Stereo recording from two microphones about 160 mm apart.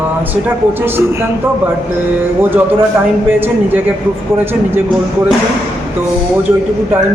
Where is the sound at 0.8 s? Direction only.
15° right (ahead or behind).